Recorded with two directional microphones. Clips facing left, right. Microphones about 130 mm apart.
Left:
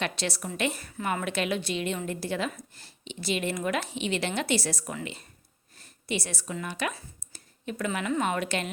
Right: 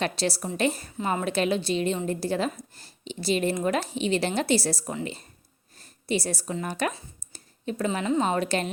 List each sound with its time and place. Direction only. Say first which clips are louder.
0.0 s a woman's voice: right 4 dB; 35° right (ahead or behind)